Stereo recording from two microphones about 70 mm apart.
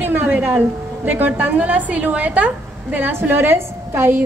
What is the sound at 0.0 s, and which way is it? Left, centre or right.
A woman's voice, right.